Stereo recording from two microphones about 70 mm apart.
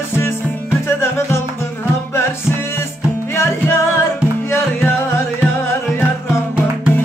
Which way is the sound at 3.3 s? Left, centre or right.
Left.